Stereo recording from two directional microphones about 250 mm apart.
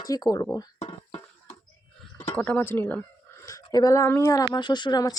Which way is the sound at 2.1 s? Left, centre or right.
Centre.